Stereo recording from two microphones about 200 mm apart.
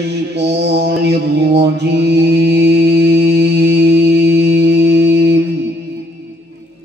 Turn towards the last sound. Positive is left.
turn(degrees=-60)  # may be behind; listen again after turning